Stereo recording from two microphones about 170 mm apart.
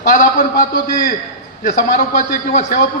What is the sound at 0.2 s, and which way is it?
A man's voice, 55° left (ahead or behind).